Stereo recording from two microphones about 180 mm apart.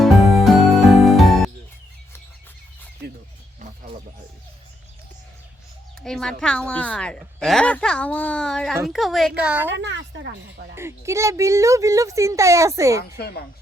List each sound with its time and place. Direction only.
0.0 s music: centre (ahead or behind)
6.0 s a sound: 5° left (ahead or behind)
6.4 s a woman's voice: 5° left (ahead or behind)
9.7 s speech: 75° right (ahead or behind)
10.8 s speech: 15° right (ahead or behind)
13.1 s a woman's voice: 60° left (ahead or behind)